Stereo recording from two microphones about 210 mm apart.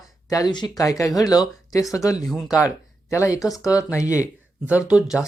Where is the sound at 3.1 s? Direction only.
15° left (ahead or behind).